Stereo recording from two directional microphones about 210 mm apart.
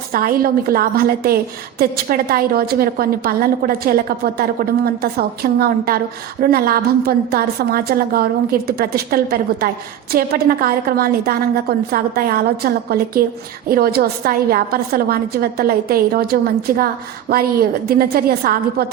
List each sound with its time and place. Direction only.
0.1 s a woman's voice: 45° right (ahead or behind)